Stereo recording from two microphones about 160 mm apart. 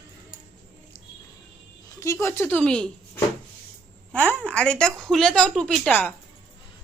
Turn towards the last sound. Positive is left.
turn(degrees=10)  # may be behind; listen again after turning